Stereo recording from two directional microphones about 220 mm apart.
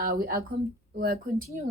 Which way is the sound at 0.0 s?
40° right (ahead or behind).